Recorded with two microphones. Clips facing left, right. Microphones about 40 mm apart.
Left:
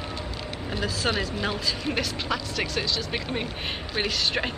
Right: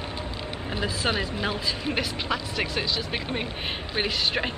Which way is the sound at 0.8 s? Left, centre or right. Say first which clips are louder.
Even; centre.